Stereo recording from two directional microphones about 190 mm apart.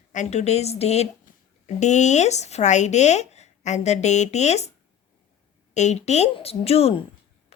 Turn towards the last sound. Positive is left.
turn(degrees=30)  # may be behind; listen again after turning